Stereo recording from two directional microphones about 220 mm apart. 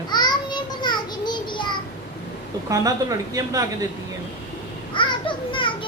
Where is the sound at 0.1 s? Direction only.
20° left (ahead or behind).